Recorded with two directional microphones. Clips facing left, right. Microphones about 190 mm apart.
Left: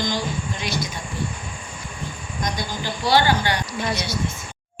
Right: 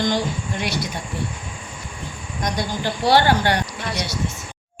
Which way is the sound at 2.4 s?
65° right (ahead or behind).